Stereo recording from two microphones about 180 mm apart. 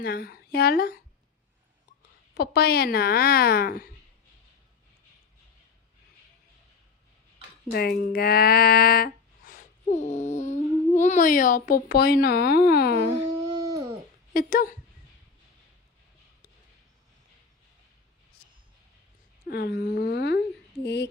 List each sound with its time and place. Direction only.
0.0 s speech: 60° left (ahead or behind)
2.3 s speech: 60° left (ahead or behind)
7.7 s speech: 60° left (ahead or behind)
13.5 s a sound: 20° right (ahead or behind)
14.3 s speech: 50° left (ahead or behind)
19.5 s speech: 60° left (ahead or behind)
20.8 s a sound: 70° left (ahead or behind)